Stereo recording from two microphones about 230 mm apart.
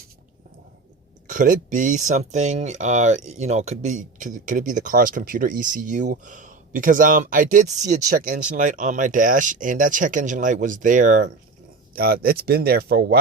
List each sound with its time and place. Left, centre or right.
1.3 s speech: right